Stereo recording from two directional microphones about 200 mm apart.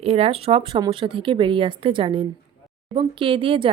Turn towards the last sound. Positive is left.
turn(degrees=-25)  # may be behind; listen again after turning